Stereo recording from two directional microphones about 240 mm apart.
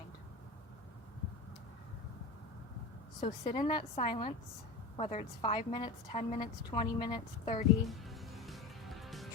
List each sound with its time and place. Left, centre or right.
3.2 s a woman's voice: left
7.9 s music: centre